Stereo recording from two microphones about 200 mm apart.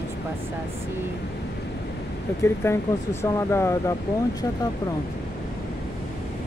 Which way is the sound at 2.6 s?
10° left (ahead or behind).